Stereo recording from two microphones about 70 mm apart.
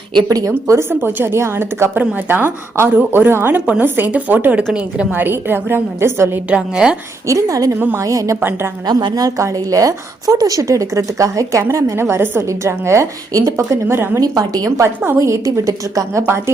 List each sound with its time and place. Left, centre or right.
0.2 s a woman's voice: right
0.9 s a woman's voice: right
2.0 s a woman's voice: right
4.7 s a woman's voice: centre
5.1 s a woman's voice: right
6.5 s a woman's voice: centre
7.3 s a woman's voice: right
8.4 s a woman's voice: right
8.9 s a woman's voice: right
13.8 s a woman's voice: right
14.2 s a woman's voice: right
14.8 s a woman's voice: right